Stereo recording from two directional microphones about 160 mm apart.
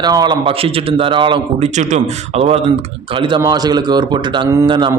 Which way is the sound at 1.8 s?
50° right (ahead or behind).